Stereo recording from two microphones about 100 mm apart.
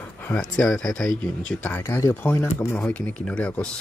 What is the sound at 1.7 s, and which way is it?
Speech, 30° left (ahead or behind).